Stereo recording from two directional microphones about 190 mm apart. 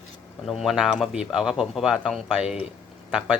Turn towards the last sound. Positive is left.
turn(degrees=-5)  # may be behind; listen again after turning